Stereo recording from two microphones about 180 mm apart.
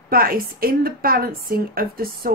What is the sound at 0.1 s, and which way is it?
Speech, 55° right (ahead or behind).